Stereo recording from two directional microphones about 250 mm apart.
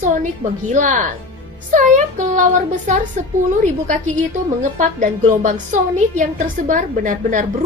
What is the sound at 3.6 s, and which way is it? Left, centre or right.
A woman's voice, right.